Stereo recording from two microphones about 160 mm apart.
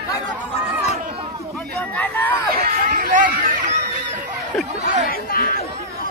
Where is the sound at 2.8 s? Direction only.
55° right (ahead or behind).